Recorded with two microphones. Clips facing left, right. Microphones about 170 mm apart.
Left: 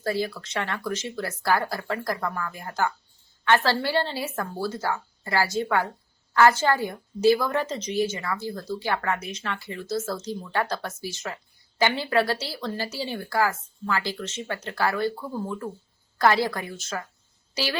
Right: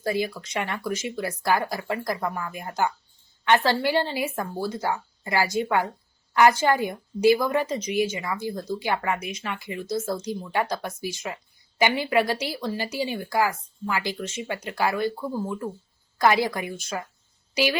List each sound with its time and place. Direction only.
0.0 s a woman's voice: 15° right (ahead or behind)